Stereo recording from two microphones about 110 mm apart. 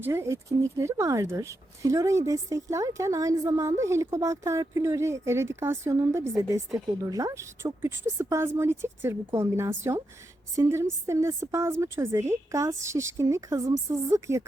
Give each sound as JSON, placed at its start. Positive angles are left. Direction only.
{"t": 0.0, "sound": "speech", "side_deg": -25}